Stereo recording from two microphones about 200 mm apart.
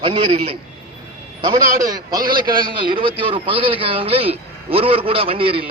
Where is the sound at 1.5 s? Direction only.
20° right (ahead or behind).